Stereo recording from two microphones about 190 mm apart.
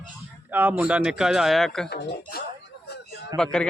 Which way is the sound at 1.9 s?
60° left (ahead or behind).